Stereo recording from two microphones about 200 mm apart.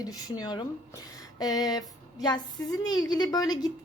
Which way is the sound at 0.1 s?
20° left (ahead or behind).